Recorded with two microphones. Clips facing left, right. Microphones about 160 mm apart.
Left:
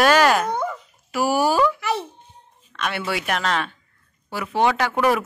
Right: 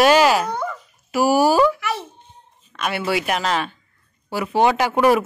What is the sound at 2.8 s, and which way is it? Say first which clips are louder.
A man's voice: right 4 dB; 5° right (ahead or behind).